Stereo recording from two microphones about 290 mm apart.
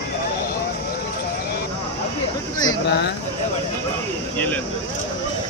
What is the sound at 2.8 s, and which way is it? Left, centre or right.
Speech, left.